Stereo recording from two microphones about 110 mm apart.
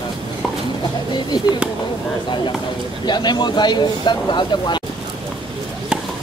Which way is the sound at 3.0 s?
40° left (ahead or behind).